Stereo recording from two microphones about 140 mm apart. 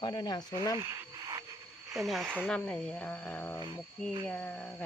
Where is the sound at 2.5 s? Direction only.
5° left (ahead or behind).